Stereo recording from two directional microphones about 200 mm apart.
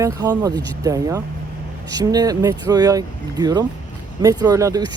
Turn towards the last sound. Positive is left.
turn(degrees=-20)  # may be behind; listen again after turning